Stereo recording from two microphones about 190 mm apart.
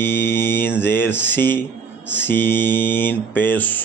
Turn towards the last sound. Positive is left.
turn(degrees=10)  # may be behind; listen again after turning